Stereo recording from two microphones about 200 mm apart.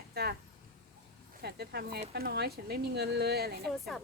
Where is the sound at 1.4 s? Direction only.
50° right (ahead or behind).